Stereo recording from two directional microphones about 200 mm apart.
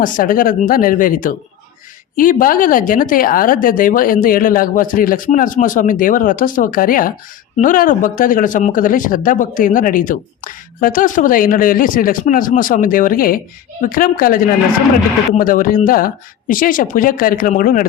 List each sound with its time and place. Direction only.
0.0 s speech: 45° left (ahead or behind)